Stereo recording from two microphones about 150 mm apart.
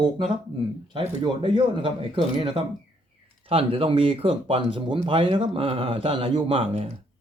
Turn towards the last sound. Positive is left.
turn(degrees=-35)  # may be behind; listen again after turning